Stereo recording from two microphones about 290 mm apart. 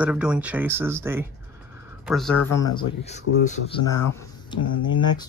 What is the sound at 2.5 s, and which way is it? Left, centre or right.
Speech, centre.